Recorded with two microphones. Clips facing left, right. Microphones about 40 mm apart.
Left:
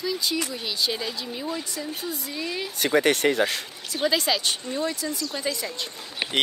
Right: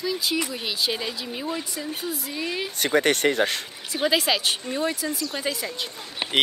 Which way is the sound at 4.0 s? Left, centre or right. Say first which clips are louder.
Right 1 dB; centre.